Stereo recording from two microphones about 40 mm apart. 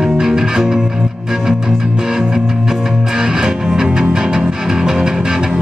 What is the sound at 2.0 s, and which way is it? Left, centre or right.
Music, centre.